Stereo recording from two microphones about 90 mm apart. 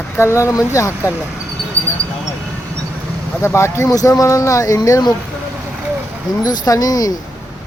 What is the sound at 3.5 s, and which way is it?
Speech, 30° left (ahead or behind).